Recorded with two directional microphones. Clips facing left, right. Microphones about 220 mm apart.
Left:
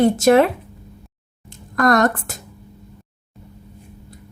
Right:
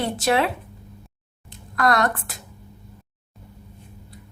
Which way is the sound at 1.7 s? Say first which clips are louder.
Left 5 dB; 45° left (ahead or behind).